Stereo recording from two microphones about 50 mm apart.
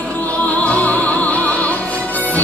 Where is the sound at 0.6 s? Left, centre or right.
Left.